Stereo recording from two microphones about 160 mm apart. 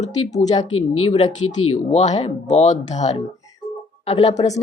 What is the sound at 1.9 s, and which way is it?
Speech, 45° left (ahead or behind).